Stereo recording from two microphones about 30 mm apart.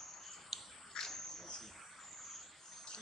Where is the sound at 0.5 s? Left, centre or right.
Centre.